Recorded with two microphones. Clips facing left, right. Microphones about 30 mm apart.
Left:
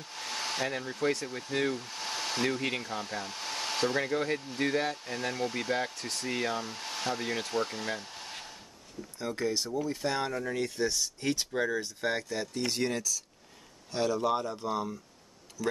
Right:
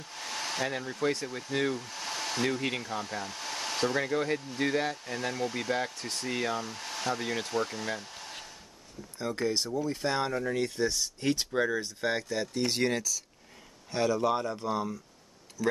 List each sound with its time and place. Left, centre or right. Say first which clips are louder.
0.0 s hair dryer: even; centre
1.2 s speech: right 1 dB; centre
9.3 s speech: right 1 dB; right
12.5 s speech: right 3 dB; right
13.9 s speech: right 1 dB; centre